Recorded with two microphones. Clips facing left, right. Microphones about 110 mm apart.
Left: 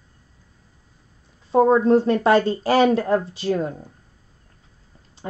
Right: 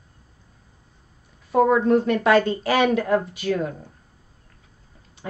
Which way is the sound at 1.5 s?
30° left (ahead or behind).